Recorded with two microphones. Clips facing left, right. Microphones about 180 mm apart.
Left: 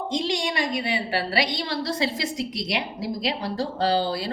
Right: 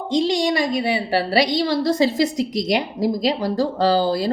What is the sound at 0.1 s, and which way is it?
A woman's voice, 35° right (ahead or behind).